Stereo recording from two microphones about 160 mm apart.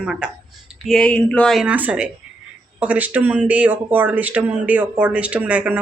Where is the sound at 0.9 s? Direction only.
5° left (ahead or behind).